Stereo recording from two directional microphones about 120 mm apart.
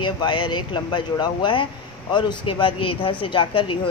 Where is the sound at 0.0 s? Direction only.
40° left (ahead or behind).